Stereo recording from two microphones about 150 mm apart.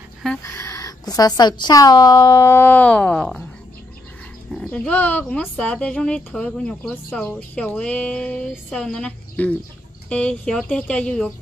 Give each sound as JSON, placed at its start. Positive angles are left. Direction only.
{"t": 0.4, "sound": "speech", "side_deg": 20}
{"t": 4.5, "sound": "speech", "side_deg": 5}